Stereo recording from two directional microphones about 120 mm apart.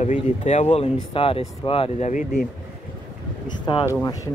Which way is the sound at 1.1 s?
50° left (ahead or behind).